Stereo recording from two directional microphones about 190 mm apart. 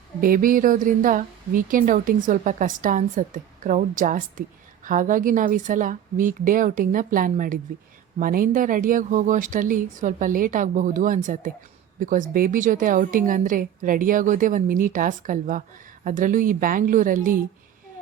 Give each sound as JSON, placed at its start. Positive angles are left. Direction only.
{"t": 0.2, "sound": "a woman's voice", "side_deg": -45}